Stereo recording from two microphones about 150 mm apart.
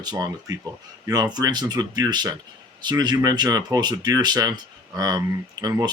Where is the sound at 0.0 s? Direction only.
25° right (ahead or behind).